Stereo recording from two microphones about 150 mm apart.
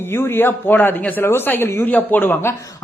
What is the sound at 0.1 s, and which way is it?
Speech, 15° left (ahead or behind).